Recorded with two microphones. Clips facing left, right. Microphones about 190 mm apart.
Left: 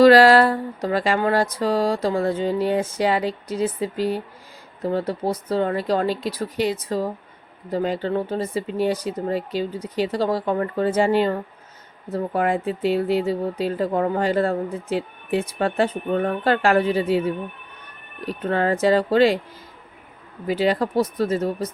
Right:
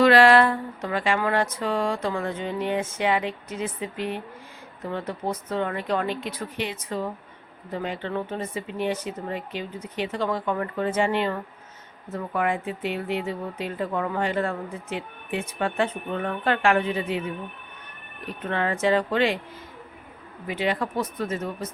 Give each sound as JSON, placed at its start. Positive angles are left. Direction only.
{"t": 0.0, "sound": "speech", "side_deg": 40}
{"t": 20.5, "sound": "speech", "side_deg": 35}